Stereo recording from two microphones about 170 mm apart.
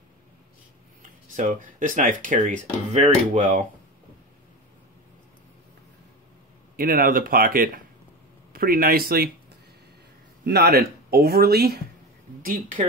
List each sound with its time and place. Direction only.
1.3 s speech: 50° right (ahead or behind)
6.8 s speech: 55° right (ahead or behind)
10.4 s speech: 70° right (ahead or behind)
12.4 s a woman's voice: 55° right (ahead or behind)